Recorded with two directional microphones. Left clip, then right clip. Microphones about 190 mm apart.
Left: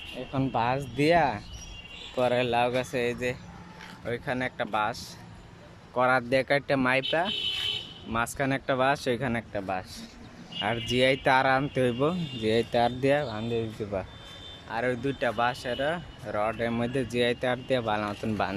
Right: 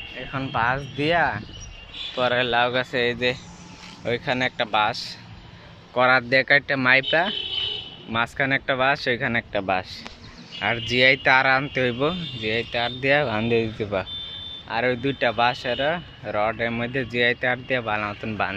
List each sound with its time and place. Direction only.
0.3 s speech: 20° left (ahead or behind); by 9.8 s centre (ahead or behind)
10.9 s speech: 15° left (ahead or behind)
12.4 s speech: 25° left (ahead or behind)
13.2 s speech: 5° right (ahead or behind); by 18.5 s 15° left (ahead or behind)